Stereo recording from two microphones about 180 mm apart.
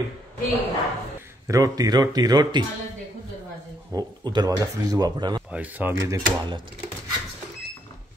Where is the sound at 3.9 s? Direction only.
25° right (ahead or behind).